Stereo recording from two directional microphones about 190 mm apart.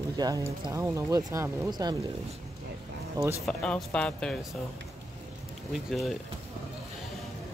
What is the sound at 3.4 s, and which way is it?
Speech, 5° left (ahead or behind).